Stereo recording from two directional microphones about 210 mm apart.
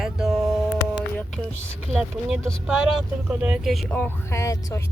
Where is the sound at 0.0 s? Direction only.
Centre (ahead or behind).